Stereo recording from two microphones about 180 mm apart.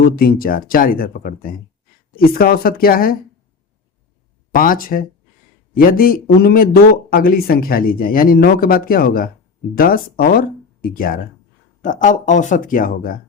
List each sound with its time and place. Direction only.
0.0 s speech: 55° left (ahead or behind)
4.5 s speech: 50° left (ahead or behind)